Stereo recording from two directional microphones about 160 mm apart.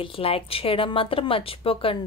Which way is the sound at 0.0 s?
35° left (ahead or behind).